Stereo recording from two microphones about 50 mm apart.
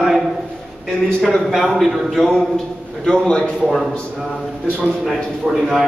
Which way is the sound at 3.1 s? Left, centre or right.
Centre.